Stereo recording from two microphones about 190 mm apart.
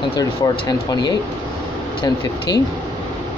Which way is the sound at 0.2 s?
20° left (ahead or behind).